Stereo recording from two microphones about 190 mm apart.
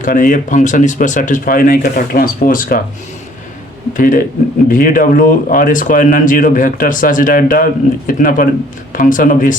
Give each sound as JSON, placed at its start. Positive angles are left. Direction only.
{"t": 0.0, "sound": "speech", "side_deg": 45}
{"t": 3.9, "sound": "speech", "side_deg": 45}